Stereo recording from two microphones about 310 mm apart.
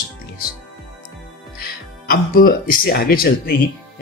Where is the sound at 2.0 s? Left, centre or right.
Left.